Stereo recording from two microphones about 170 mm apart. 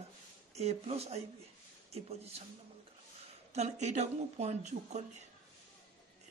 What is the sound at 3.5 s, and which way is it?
Speech, 40° right (ahead or behind).